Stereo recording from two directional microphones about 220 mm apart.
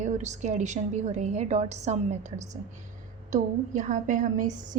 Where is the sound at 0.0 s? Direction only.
30° right (ahead or behind).